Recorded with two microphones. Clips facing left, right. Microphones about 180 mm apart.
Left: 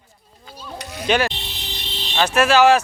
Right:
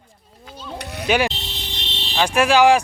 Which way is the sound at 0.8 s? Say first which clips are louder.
Right 1 dB; 60° right (ahead or behind).